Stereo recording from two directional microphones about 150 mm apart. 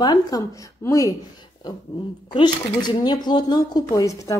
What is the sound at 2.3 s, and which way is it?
Speech, 30° left (ahead or behind).